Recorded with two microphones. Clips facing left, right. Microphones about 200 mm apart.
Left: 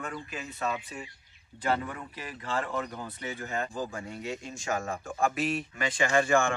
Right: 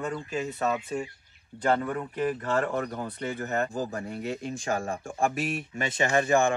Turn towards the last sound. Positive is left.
turn(degrees=-20)  # may be behind; listen again after turning